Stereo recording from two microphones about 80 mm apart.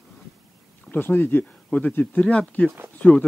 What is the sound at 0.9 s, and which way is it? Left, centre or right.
Speech, left.